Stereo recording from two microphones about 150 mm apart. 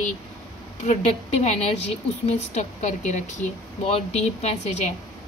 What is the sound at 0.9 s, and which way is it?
Speech, 45° left (ahead or behind).